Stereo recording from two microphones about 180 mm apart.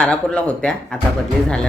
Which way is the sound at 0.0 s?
5° left (ahead or behind).